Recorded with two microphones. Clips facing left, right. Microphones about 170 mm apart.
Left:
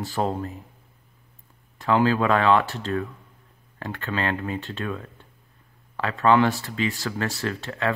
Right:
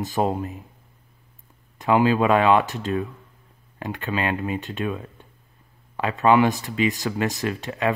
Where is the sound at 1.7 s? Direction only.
15° right (ahead or behind).